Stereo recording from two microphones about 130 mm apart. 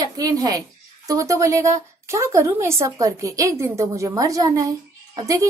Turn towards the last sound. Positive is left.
turn(degrees=-30)  # may be behind; listen again after turning